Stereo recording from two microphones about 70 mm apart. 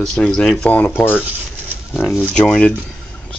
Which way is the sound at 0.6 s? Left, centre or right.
Left.